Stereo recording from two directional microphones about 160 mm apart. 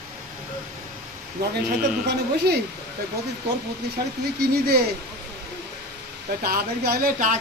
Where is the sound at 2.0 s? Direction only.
85° right.